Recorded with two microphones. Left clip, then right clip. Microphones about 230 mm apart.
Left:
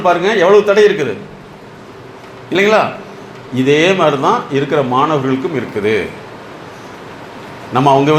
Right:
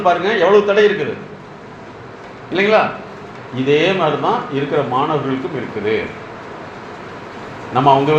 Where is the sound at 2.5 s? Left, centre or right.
Left.